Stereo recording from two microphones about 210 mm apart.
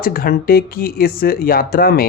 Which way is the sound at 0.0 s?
45° left (ahead or behind).